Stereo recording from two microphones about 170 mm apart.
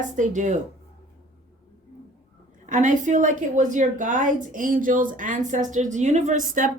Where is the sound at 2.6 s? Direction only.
50° right (ahead or behind).